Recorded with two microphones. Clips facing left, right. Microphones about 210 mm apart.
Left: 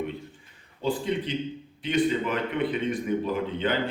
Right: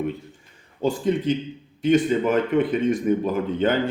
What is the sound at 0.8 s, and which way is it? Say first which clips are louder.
Speech: right 5 dB; 45° right (ahead or behind).